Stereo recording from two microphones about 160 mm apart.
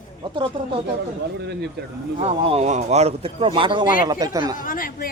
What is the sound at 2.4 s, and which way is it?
Speech, 40° right (ahead or behind).